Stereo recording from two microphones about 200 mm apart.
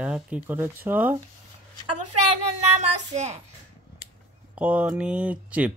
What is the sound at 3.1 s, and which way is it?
Speech, 35° right (ahead or behind).